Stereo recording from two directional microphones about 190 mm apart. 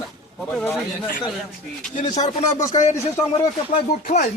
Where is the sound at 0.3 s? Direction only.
Centre (ahead or behind).